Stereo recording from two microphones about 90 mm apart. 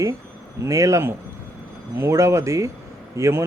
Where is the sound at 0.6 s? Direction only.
35° right (ahead or behind).